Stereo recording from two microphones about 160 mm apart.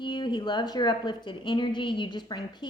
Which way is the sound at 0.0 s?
30° left (ahead or behind).